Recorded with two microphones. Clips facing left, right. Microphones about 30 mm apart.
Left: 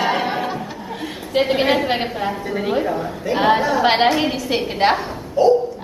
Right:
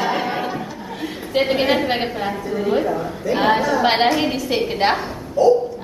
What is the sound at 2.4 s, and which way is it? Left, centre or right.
Speech, left.